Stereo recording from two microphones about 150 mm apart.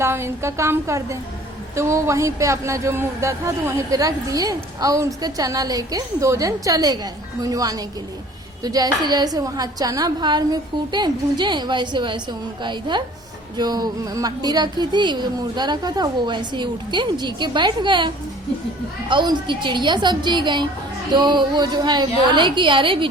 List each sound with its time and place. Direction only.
0.0 s a woman's voice: 15° right (ahead or behind); by 23.0 s 35° right (ahead or behind)